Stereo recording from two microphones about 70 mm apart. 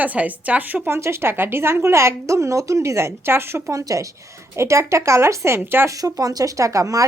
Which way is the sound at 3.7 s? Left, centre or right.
Right.